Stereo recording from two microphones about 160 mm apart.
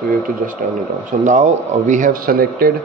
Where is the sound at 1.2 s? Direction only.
50° right (ahead or behind); by 2.7 s 65° right (ahead or behind).